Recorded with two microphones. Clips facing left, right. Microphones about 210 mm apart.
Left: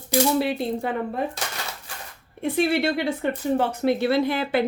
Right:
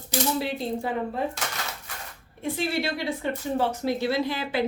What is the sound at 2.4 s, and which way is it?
Speech, 60° left (ahead or behind).